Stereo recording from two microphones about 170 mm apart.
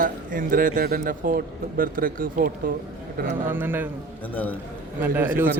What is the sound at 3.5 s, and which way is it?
Speech, 10° right (ahead or behind).